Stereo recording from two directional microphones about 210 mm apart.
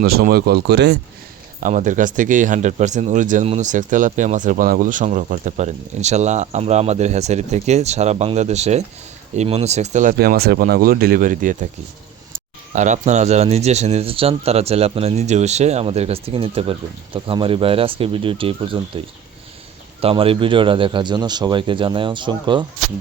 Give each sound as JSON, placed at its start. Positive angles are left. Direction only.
{"t": 0.0, "sound": "speech", "side_deg": -45}
{"t": 1.6, "sound": "speech", "side_deg": -35}
{"t": 12.7, "sound": "speech", "side_deg": -35}